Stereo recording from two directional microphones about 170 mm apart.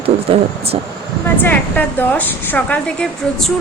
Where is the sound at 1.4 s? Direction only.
10° left (ahead or behind).